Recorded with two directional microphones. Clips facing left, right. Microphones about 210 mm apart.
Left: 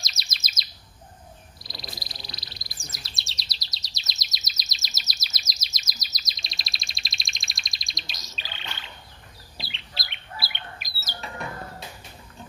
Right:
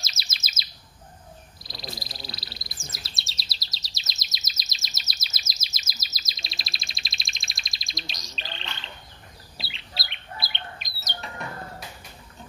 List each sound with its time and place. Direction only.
0.2 s chirp: centre (ahead or behind)
1.6 s frog: centre (ahead or behind)
2.0 s bird: centre (ahead or behind)